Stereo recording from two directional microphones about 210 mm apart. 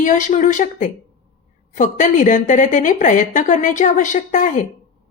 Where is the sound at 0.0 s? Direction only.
40° left (ahead or behind).